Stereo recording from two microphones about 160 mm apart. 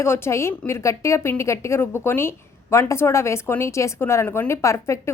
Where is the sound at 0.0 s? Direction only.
15° left (ahead or behind).